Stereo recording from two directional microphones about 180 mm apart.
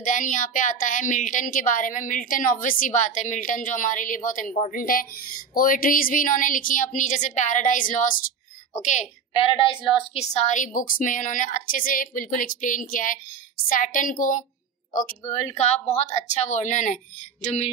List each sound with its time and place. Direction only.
0.0 s a woman's voice: 45° left (ahead or behind)